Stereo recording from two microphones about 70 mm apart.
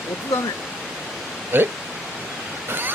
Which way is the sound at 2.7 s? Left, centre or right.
Right.